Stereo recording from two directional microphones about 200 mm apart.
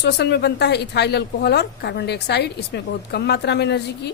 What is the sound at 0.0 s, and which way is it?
A woman's voice, 55° left (ahead or behind).